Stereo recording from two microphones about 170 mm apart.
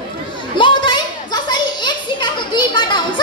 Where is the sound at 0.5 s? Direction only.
30° left (ahead or behind).